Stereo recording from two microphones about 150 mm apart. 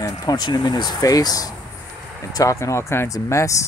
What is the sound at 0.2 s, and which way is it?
Speech, 30° left (ahead or behind).